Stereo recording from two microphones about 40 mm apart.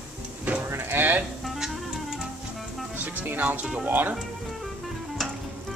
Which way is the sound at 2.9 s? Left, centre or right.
Right.